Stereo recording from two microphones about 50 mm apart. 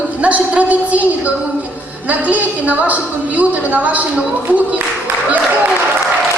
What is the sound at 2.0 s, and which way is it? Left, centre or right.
A woman's voice, right.